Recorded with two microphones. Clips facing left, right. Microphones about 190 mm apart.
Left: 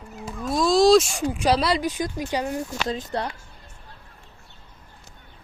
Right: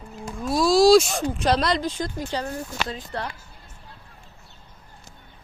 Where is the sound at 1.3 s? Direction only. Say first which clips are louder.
Left 1 dB; 10° left (ahead or behind).